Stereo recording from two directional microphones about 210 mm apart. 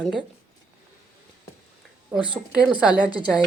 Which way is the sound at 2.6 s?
5° right (ahead or behind).